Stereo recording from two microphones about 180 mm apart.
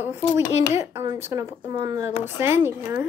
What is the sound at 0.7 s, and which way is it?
Speech, 15° right (ahead or behind).